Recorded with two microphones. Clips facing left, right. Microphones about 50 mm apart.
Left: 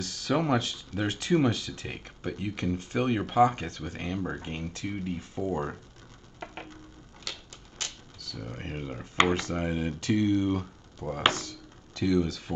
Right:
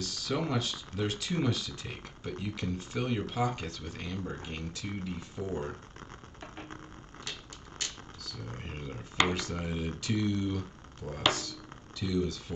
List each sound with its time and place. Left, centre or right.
0.0 s speech: left
8.5 s speech: left